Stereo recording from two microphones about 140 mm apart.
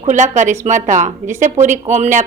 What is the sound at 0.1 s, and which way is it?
A woman's voice, 60° right (ahead or behind).